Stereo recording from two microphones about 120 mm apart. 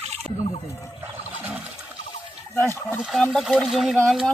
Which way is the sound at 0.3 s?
60° left (ahead or behind).